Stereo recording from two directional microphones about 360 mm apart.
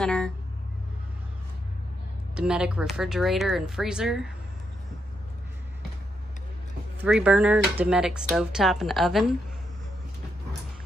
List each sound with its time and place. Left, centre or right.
0.0 s speech: centre
2.3 s speech: centre
7.1 s speech: centre